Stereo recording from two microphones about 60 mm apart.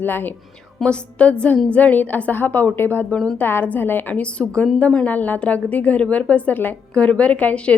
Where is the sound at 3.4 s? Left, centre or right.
Left.